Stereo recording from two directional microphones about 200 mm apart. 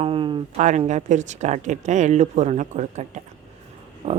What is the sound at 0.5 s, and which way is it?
Speech, 35° right (ahead or behind).